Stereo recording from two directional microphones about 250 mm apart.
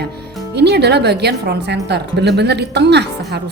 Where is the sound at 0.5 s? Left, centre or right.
Right.